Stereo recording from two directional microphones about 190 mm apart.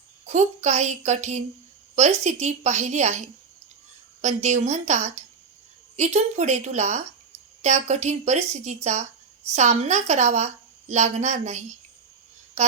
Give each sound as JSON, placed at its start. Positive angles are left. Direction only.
{"t": 0.3, "sound": "a woman's voice", "side_deg": -35}